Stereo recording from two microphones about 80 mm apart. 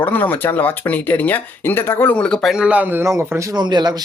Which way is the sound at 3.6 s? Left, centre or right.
Right.